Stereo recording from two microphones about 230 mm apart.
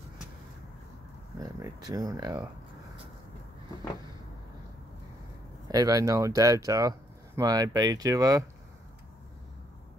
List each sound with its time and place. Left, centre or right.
1.4 s speech: centre
5.7 s speech: centre